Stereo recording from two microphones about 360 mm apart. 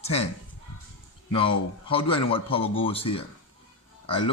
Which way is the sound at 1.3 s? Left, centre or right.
Centre.